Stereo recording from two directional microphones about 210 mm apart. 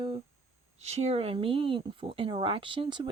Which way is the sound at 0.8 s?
30° right (ahead or behind).